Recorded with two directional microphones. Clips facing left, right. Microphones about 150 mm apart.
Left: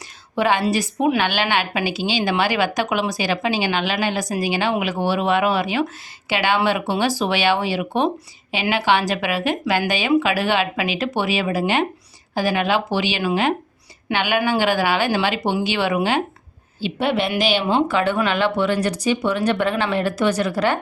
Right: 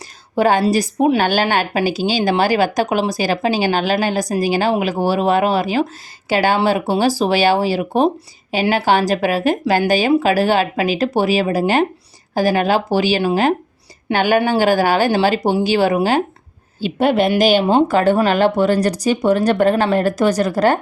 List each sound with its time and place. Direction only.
0.3 s a woman's voice: 40° right (ahead or behind)